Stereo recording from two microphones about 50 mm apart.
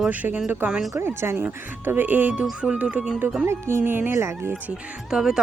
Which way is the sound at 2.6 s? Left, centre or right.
Right.